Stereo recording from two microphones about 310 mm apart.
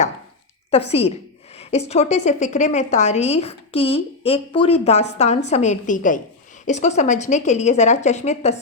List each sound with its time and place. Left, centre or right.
0.7 s a woman's voice: centre